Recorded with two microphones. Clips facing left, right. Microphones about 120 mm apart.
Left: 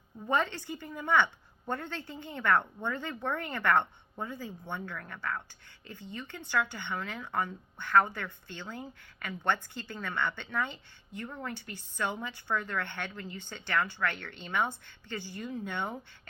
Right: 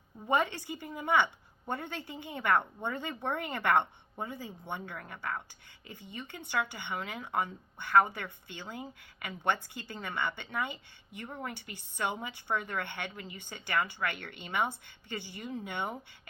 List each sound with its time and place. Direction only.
0.3 s speech: 15° right (ahead or behind)